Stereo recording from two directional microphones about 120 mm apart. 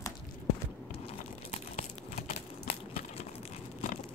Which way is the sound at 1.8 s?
65° left (ahead or behind).